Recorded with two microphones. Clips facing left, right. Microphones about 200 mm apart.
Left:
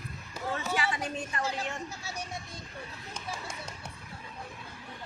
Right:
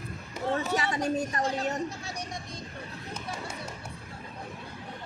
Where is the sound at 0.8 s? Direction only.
40° right (ahead or behind).